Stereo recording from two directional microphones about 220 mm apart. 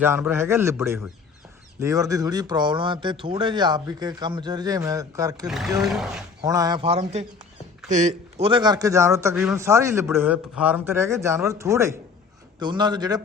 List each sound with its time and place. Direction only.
0.0 s speech: 10° right (ahead or behind)
0.8 s speech: centre (ahead or behind)
1.8 s speech: 15° right (ahead or behind)
5.5 s speech: centre (ahead or behind)
6.4 s speech: 15° right (ahead or behind)
9.3 s speech: centre (ahead or behind)
9.6 s speech: 15° right (ahead or behind)